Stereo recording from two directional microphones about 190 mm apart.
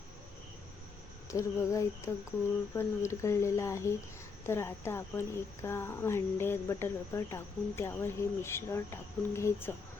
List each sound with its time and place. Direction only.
1.3 s a woman's voice: 15° left (ahead or behind)